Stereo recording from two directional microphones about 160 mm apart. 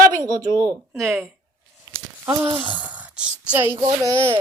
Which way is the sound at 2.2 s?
15° right (ahead or behind).